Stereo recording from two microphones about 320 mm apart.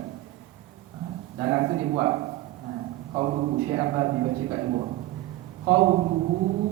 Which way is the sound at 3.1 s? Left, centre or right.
Centre.